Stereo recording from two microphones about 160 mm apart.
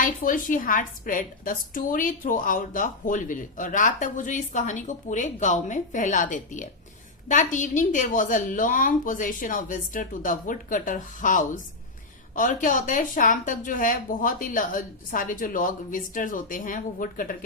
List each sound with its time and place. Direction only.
0.0 s a woman's voice: 60° left (ahead or behind)